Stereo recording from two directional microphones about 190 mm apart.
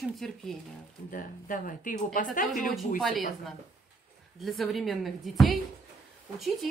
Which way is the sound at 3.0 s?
Centre (ahead or behind).